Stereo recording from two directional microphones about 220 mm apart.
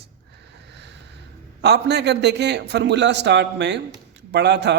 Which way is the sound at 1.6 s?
50° right (ahead or behind).